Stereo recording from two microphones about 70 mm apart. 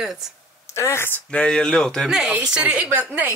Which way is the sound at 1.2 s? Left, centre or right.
Centre.